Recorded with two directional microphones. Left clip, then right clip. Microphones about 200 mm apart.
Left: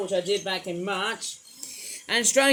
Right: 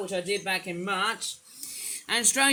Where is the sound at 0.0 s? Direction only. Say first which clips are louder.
Left 4 dB; 25° right (ahead or behind).